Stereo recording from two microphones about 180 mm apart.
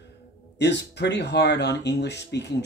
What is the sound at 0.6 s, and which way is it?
Speech, 70° left (ahead or behind).